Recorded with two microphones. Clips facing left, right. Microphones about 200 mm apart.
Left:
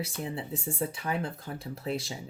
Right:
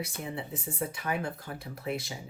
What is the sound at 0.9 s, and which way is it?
Speech, 30° left (ahead or behind).